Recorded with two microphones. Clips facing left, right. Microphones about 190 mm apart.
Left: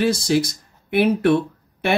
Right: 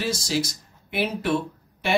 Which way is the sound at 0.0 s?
60° left (ahead or behind).